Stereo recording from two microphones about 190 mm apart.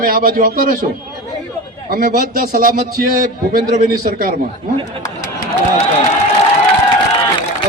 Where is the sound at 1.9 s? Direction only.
45° right (ahead or behind).